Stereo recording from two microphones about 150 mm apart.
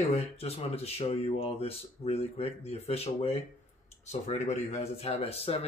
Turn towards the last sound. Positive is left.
turn(degrees=40)  # may be behind; listen again after turning